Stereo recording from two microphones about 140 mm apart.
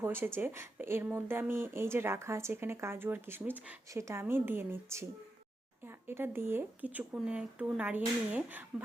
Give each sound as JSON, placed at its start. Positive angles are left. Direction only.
{"t": 0.0, "sound": "speech", "side_deg": -15}